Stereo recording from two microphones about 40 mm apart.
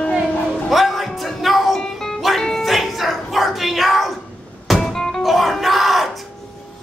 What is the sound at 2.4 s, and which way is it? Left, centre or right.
Music, centre.